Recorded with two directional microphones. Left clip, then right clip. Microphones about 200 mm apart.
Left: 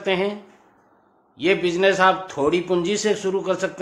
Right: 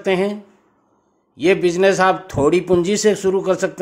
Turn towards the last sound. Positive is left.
turn(degrees=-50)  # may be behind; listen again after turning